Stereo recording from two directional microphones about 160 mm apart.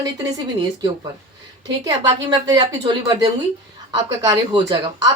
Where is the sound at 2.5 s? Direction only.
25° right (ahead or behind).